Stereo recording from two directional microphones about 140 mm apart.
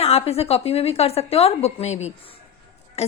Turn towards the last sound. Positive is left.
turn(degrees=50)  # may be behind; listen again after turning